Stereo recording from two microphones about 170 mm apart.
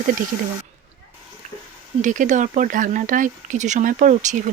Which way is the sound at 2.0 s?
50° right (ahead or behind).